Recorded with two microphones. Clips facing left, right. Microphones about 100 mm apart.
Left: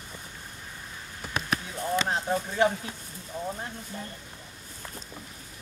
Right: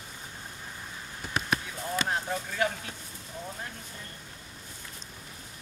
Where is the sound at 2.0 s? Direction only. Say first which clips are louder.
Left 3 dB; 25° left (ahead or behind).